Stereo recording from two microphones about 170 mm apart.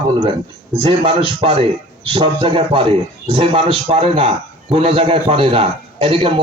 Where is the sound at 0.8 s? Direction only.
25° right (ahead or behind).